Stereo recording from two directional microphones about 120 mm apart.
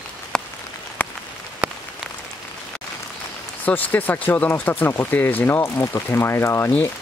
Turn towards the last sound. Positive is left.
turn(degrees=20)  # may be behind; listen again after turning